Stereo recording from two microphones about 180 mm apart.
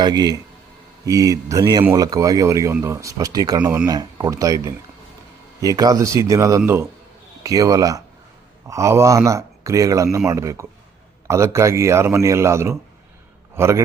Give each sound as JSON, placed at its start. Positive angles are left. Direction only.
{"t": 0.0, "sound": "speech", "side_deg": -20}